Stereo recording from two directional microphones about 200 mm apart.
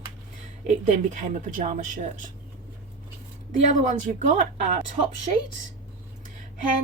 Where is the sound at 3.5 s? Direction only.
40° right (ahead or behind).